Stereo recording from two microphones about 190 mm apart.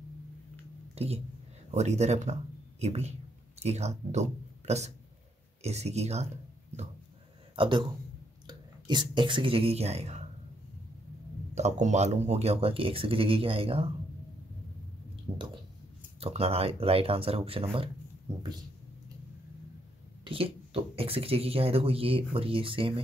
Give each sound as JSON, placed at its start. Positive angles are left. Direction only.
{"t": 0.9, "sound": "speech", "side_deg": -35}
{"t": 7.5, "sound": "speech", "side_deg": -25}
{"t": 11.5, "sound": "speech", "side_deg": -35}
{"t": 15.3, "sound": "speech", "side_deg": -25}
{"t": 20.2, "sound": "speech", "side_deg": -30}